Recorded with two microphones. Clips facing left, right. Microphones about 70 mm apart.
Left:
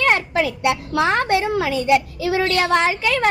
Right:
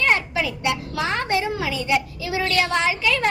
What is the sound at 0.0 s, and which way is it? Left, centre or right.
A child's voice, left.